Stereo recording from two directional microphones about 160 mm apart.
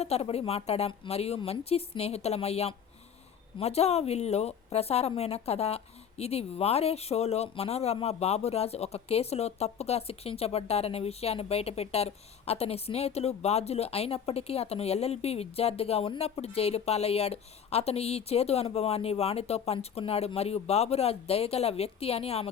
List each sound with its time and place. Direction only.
0.0 s a woman's voice: 40° left (ahead or behind)